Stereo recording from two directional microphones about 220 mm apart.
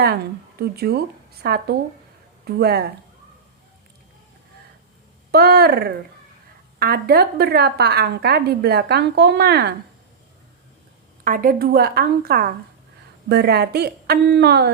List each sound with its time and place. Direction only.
0.6 s a woman's voice: 45° right (ahead or behind)
5.3 s a woman's voice: 45° right (ahead or behind)
11.2 s a woman's voice: 40° right (ahead or behind)